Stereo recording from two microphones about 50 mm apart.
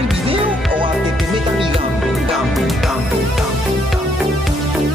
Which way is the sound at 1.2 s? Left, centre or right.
Centre.